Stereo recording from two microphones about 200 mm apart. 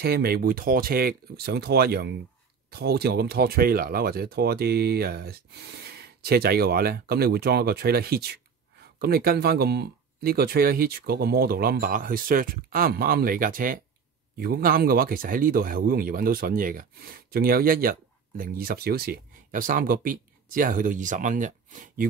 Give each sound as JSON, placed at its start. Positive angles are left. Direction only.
{"t": 0.0, "sound": "speech", "side_deg": -50}